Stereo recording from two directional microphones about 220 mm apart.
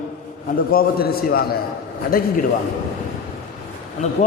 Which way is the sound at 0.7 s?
45° left (ahead or behind).